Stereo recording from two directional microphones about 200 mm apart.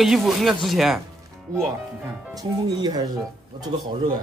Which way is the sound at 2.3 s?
20° right (ahead or behind).